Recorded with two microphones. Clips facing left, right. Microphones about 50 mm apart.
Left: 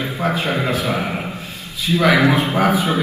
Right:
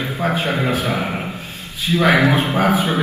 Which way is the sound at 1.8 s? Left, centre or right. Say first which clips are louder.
Even; right.